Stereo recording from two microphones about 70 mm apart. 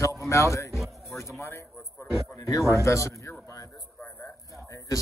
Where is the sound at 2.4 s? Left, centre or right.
Left.